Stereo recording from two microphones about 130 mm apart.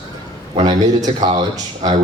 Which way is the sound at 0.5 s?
30° right (ahead or behind).